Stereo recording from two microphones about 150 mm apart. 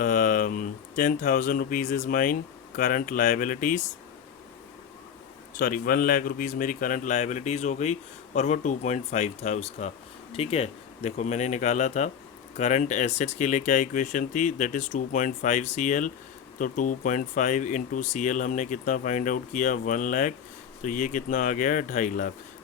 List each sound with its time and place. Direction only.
0.0 s speech: 60° left (ahead or behind)
5.5 s speech: 65° left (ahead or behind)